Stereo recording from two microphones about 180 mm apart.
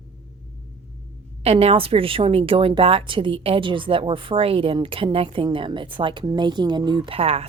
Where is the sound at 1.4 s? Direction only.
30° right (ahead or behind).